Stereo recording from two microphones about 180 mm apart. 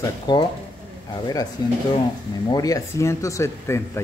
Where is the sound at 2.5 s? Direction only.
20° left (ahead or behind).